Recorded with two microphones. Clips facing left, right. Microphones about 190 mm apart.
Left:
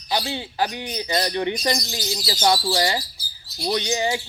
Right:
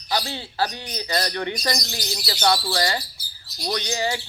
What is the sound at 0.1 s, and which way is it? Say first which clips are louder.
Bird: left 1 dB; 15° left (ahead or behind).